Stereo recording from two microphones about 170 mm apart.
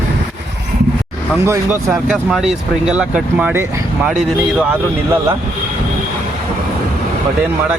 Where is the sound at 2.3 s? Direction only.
5° right (ahead or behind).